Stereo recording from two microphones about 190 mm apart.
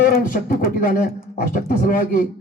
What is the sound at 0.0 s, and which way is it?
A man's voice, 50° left (ahead or behind).